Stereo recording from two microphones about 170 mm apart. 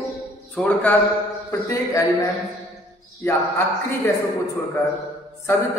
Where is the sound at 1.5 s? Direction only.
15° left (ahead or behind).